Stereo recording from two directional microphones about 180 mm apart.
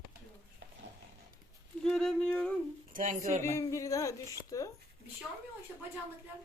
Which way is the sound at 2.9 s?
45° right (ahead or behind).